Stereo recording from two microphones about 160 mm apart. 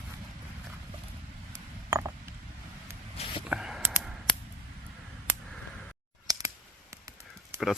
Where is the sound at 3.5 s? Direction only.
5° right (ahead or behind).